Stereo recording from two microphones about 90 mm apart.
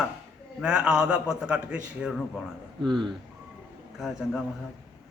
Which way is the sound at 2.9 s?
55° right (ahead or behind).